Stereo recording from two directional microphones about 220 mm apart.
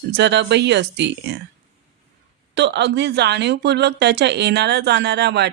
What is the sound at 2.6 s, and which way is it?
A woman's voice, 50° right (ahead or behind).